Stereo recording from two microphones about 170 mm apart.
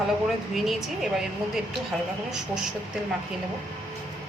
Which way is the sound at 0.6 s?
5° right (ahead or behind).